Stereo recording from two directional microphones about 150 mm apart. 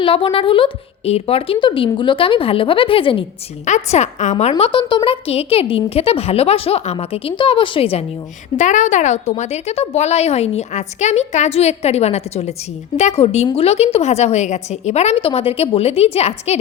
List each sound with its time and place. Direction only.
0.0 s a woman's voice: 35° left (ahead or behind)
3.7 s a woman's voice: 45° left (ahead or behind)
8.5 s a woman's voice: 55° left (ahead or behind)